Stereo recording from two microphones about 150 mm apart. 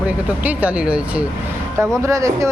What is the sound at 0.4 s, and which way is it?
Speech, 10° right (ahead or behind).